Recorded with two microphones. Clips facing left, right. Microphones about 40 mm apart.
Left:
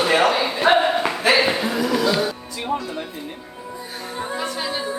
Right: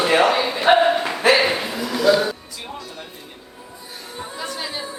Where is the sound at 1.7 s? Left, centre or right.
Left.